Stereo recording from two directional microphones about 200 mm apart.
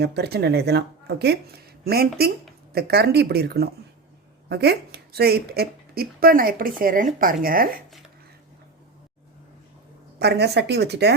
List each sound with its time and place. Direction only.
0.0 s a woman's voice: 55° right (ahead or behind)
10.2 s a woman's voice: 55° right (ahead or behind)